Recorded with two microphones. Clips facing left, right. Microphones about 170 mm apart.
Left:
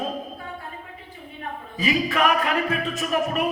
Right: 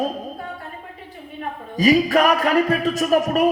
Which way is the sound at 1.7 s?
40° right (ahead or behind).